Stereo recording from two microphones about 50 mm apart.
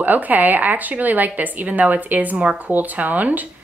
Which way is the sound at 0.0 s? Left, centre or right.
Right.